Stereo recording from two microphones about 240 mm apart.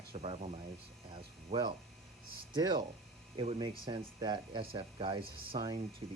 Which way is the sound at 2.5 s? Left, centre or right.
Centre.